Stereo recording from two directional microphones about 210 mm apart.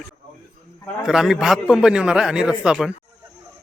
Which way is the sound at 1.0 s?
Centre (ahead or behind).